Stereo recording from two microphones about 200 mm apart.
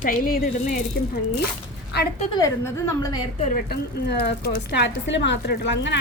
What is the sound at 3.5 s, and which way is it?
A woman's voice, 50° left (ahead or behind).